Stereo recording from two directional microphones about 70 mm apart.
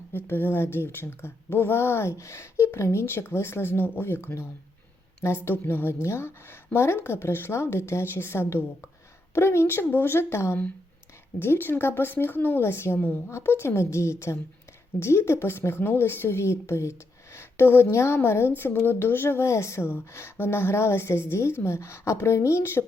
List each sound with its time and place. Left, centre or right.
0.3 s speech: left